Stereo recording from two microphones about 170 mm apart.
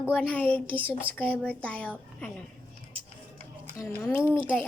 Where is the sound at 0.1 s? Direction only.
10° left (ahead or behind).